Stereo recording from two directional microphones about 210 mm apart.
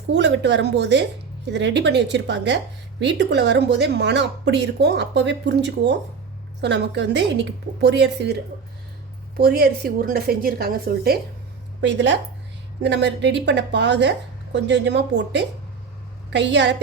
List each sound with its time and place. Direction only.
0.1 s a woman's voice: 55° right (ahead or behind)
9.4 s a woman's voice: 50° right (ahead or behind)
11.8 s speech: 60° right (ahead or behind)